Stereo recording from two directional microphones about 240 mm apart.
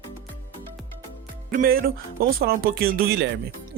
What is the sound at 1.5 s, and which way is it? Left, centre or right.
Speech, right.